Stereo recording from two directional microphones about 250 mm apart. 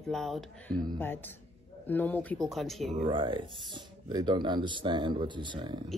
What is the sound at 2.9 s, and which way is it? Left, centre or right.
Speech, right.